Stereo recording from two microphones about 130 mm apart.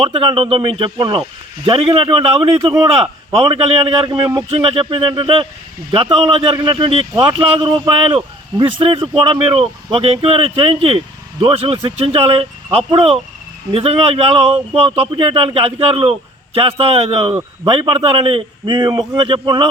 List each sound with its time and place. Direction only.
0.0 s a man's voice: 40° right (ahead or behind)